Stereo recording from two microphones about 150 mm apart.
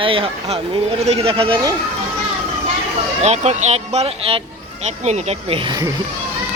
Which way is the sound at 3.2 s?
45° right (ahead or behind).